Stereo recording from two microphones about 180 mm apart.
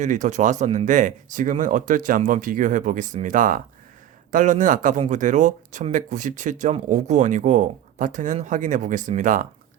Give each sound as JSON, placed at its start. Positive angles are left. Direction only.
{"t": 0.0, "sound": "speech", "side_deg": -40}